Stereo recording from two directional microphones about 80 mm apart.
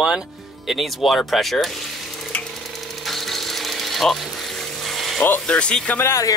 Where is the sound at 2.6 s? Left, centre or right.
Centre.